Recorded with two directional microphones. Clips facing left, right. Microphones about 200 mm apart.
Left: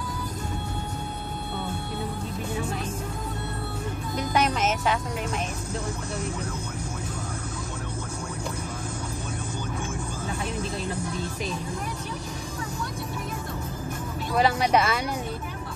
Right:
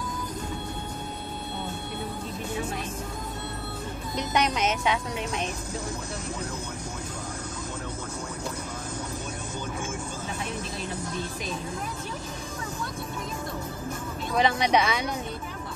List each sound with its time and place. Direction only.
4.2 s music: 5° left (ahead or behind)
14.3 s speech: 5° left (ahead or behind)